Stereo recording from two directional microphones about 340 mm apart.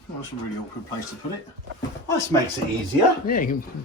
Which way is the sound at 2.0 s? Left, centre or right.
Centre.